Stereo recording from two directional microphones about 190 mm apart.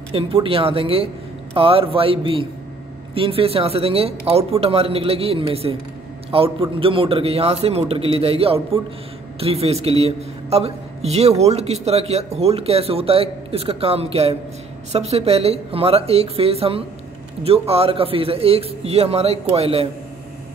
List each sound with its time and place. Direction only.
0.1 s a man's voice: 30° right (ahead or behind)